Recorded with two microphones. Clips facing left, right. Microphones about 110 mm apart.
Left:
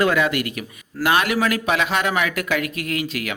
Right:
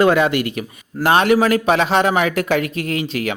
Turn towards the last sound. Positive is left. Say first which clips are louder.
# right 4 dB
turn(degrees=-30)  # may be behind; listen again after turning